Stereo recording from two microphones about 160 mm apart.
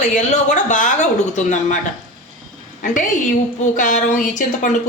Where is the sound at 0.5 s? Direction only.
50° left (ahead or behind).